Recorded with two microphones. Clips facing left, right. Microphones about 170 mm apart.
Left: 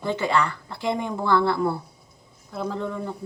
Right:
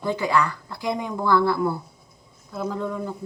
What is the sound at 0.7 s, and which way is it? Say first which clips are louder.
Speech: left 1 dB; 70° left (ahead or behind).